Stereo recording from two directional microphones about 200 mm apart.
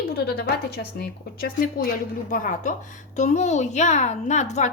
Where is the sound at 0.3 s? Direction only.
50° left (ahead or behind).